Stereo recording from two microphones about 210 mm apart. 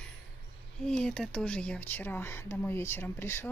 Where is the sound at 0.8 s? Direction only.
5° left (ahead or behind).